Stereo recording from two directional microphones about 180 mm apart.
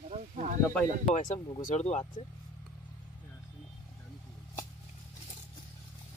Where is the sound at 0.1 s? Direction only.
40° right (ahead or behind).